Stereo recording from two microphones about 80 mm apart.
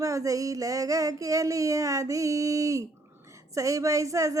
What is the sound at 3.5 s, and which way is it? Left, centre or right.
Speech, right.